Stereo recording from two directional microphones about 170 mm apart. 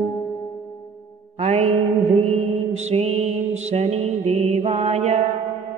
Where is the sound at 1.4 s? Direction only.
40° right (ahead or behind).